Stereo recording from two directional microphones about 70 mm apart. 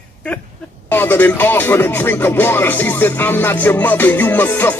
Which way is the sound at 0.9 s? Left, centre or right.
Left.